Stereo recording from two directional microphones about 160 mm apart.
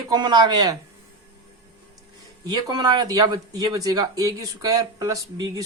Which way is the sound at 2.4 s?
25° right (ahead or behind).